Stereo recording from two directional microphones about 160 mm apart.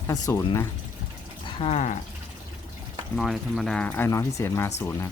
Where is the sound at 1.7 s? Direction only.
50° left (ahead or behind).